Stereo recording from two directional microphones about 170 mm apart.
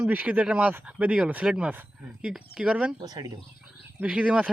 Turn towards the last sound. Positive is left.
turn(degrees=-5)  # may be behind; listen again after turning